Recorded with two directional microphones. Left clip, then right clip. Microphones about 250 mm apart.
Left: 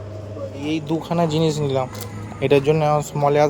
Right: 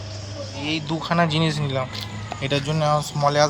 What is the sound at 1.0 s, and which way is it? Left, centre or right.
Speech, centre.